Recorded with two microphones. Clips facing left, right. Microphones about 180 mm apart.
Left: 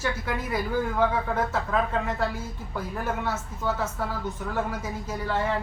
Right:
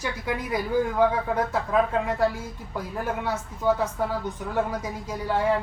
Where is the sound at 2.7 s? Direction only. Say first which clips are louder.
Right 1 dB; 15° right (ahead or behind).